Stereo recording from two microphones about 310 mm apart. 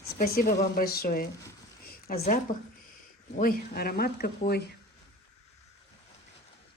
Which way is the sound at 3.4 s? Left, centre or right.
Left.